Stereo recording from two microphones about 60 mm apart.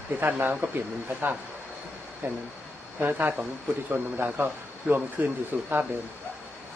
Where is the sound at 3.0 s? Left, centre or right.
Right.